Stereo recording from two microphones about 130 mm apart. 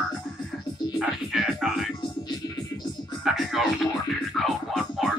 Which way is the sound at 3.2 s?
Centre (ahead or behind).